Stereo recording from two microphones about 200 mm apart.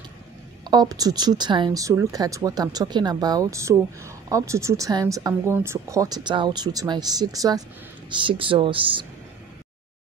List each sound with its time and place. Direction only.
0.7 s speech: 20° right (ahead or behind)